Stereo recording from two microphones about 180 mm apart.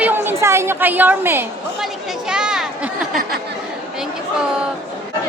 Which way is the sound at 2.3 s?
5° right (ahead or behind).